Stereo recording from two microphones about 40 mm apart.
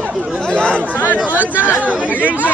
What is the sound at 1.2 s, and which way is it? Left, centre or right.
Speech, right.